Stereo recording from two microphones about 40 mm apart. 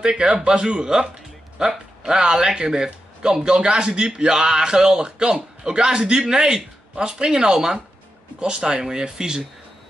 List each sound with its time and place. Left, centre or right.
0.0 s speech: right